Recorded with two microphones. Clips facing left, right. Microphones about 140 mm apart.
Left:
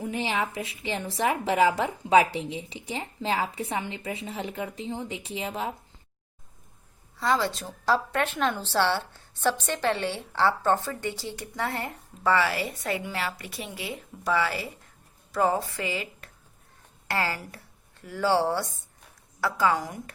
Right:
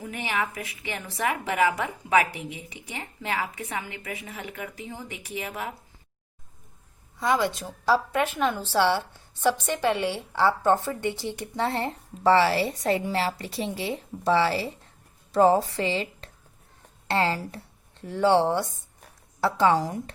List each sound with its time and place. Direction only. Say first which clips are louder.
0.0 s a woman's voice: left 1 dB; 25° left (ahead or behind)
7.2 s a woman's voice: right 1 dB; 15° right (ahead or behind)